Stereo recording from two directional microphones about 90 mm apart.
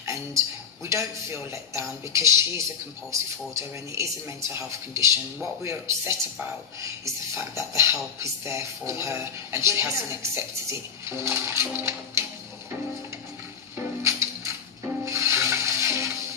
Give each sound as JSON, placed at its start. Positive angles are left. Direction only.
{"t": 0.0, "sound": "speech", "side_deg": -30}
{"t": 7.0, "sound": "speech", "side_deg": -30}
{"t": 14.0, "sound": "music", "side_deg": -35}
{"t": 15.0, "sound": "rub", "side_deg": -30}